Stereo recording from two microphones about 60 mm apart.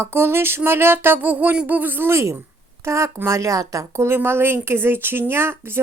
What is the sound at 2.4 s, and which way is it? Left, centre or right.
Speech, right.